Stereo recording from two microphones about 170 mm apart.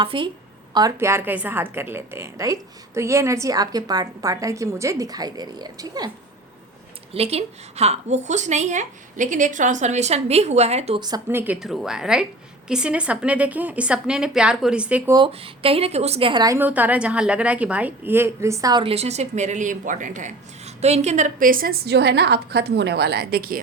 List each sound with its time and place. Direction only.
0.0 s a woman's voice: 30° right (ahead or behind)
7.1 s a woman's voice: 35° right (ahead or behind)
11.3 s a woman's voice: 10° right (ahead or behind)
15.1 s a woman's voice: 30° right (ahead or behind)
16.6 s a woman's voice: 10° right (ahead or behind); by 23.6 s 60° right (ahead or behind)